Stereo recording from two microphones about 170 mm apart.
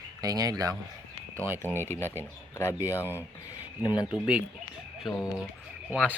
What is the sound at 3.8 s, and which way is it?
Speech, 25° left (ahead or behind).